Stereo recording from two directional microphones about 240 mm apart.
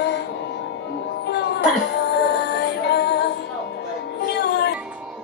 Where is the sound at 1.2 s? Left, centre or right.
Left.